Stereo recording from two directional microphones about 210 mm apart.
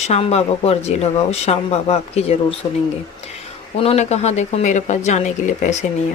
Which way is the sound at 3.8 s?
30° left (ahead or behind).